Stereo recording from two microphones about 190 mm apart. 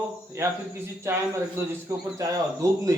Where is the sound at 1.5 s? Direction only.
15° right (ahead or behind).